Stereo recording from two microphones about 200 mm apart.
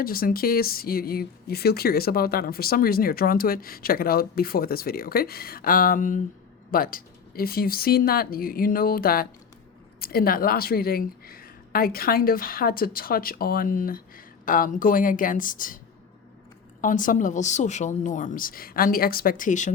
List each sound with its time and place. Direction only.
0.0 s speech: 45° left (ahead or behind)
16.8 s speech: 40° left (ahead or behind)